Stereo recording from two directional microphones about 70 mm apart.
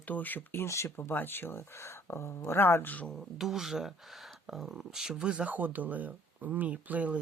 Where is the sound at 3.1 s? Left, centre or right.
Centre.